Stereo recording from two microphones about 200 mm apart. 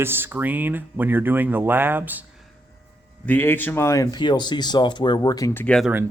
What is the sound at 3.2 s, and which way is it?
Speech, 10° left (ahead or behind).